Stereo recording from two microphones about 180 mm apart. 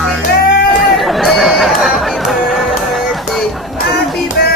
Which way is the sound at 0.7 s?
Centre (ahead or behind).